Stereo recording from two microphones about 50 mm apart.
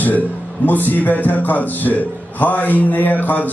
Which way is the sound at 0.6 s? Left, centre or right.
Left.